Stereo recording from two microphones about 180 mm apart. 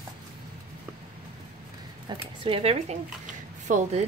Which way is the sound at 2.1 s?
30° right (ahead or behind).